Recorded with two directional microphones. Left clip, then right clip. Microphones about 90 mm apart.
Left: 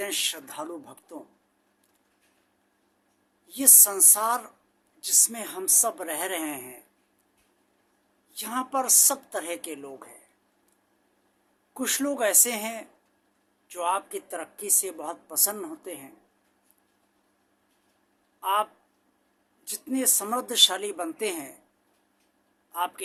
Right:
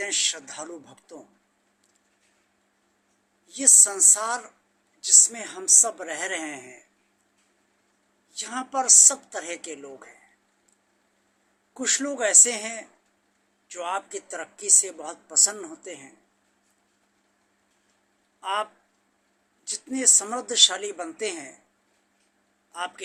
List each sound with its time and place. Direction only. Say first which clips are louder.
0.0 s a woman's voice: right 3 dB; 40° left (ahead or behind)
3.4 s a woman's voice: right 3 dB; 40° left (ahead or behind)
8.3 s a woman's voice: left 2 dB; 40° left (ahead or behind)
11.7 s a woman's voice: right 1 dB; 40° left (ahead or behind)
18.3 s a woman's voice: left 2 dB; 35° left (ahead or behind)
22.7 s a woman's voice: left 3 dB; 35° left (ahead or behind)